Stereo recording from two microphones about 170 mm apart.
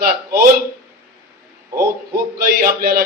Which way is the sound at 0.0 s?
60° right (ahead or behind).